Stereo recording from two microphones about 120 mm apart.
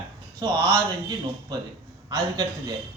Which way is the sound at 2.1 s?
35° right (ahead or behind).